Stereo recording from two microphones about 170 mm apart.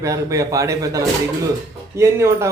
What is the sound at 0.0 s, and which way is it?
A man's voice, 20° right (ahead or behind).